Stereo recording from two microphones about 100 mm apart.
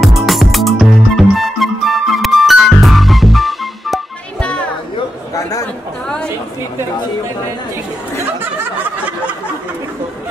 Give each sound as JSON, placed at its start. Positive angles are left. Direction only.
{"t": 0.0, "sound": "music", "side_deg": 0}
{"t": 4.4, "sound": "chatter", "side_deg": 10}
{"t": 5.3, "sound": "chatter", "side_deg": 35}